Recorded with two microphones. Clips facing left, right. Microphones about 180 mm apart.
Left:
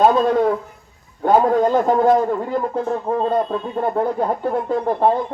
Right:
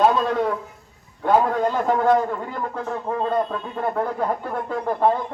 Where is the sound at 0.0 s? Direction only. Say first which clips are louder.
Left 4 dB; 40° left (ahead or behind).